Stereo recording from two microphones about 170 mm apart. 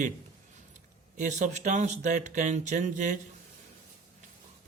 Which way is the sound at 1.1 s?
45° right (ahead or behind).